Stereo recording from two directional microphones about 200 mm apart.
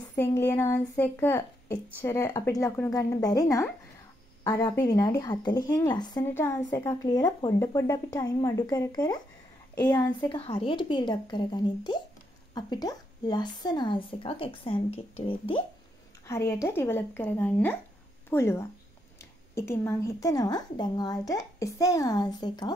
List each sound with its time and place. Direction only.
0.1 s a woman's voice: 15° left (ahead or behind)
16.3 s speech: 15° left (ahead or behind)